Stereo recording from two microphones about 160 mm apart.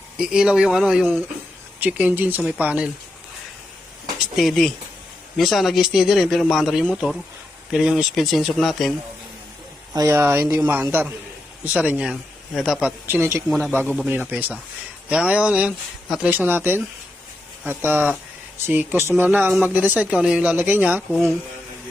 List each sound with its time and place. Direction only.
0.2 s speech: 5° right (ahead or behind)
4.4 s speech: centre (ahead or behind)
9.9 s speech: 20° right (ahead or behind); by 12.9 s centre (ahead or behind)
13.1 s speech: 15° right (ahead or behind)